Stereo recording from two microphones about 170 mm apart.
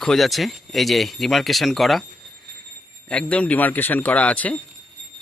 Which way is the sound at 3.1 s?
5° left (ahead or behind).